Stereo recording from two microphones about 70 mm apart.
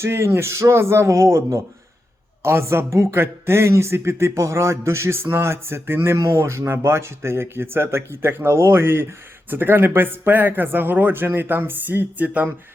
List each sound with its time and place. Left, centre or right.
0.0 s speech: right
6.1 s speech: right
6.4 s speech: right